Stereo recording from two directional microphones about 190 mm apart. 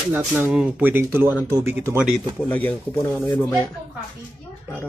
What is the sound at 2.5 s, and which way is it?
Speech, 10° left (ahead or behind).